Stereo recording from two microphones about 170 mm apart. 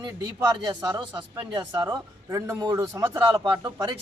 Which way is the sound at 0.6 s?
25° right (ahead or behind).